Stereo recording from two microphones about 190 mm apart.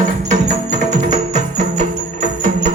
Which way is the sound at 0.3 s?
40° right (ahead or behind).